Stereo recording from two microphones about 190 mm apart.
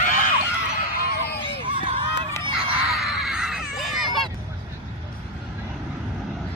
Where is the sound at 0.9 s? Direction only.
55° left (ahead or behind).